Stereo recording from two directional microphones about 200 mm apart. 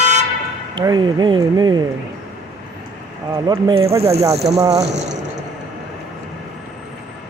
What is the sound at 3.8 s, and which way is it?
Speech, 30° right (ahead or behind).